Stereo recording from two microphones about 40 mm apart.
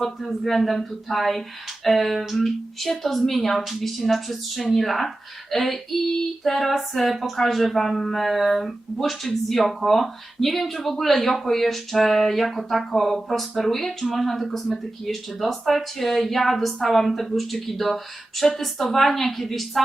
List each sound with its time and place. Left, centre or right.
0.2 s speech: centre